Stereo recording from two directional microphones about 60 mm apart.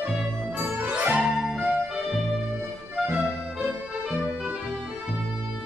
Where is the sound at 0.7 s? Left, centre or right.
Right.